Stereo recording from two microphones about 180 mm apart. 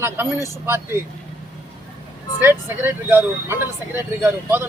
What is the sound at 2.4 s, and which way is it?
Speech, 10° right (ahead or behind).